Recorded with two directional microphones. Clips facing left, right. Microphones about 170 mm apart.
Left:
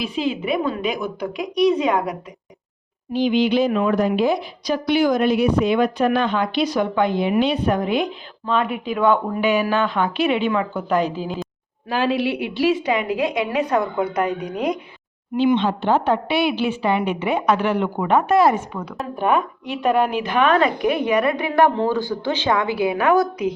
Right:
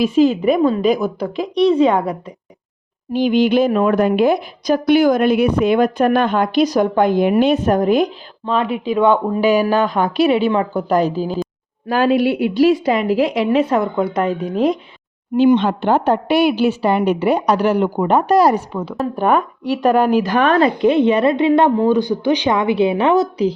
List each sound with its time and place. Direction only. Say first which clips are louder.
0.0 s a woman's voice: right 10 dB; 45° right (ahead or behind); by 2.1 s 30° right (ahead or behind)
3.1 s speech: right 4 dB; 50° right (ahead or behind)
11.9 s a woman's voice: right 6 dB; 50° right (ahead or behind); by 14.8 s 30° right (ahead or behind)
15.4 s a woman's voice: right 5 dB; 45° right (ahead or behind); by 23.5 s 25° right (ahead or behind)